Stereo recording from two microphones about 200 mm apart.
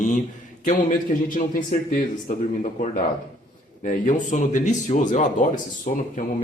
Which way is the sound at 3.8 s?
40° left (ahead or behind).